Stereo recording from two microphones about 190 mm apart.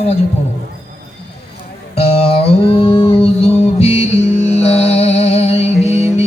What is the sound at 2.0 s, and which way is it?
Mantra, 30° left (ahead or behind).